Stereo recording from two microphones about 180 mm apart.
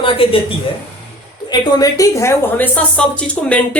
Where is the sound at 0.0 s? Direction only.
30° left (ahead or behind).